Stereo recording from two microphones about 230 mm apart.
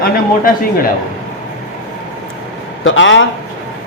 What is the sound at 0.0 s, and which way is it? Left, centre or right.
Speech, left.